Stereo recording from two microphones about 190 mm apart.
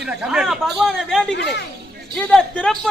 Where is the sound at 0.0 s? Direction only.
5° right (ahead or behind).